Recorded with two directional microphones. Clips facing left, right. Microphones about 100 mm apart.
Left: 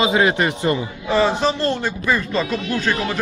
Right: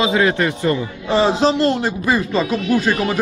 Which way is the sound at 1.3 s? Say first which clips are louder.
Right 4 dB; 90° right.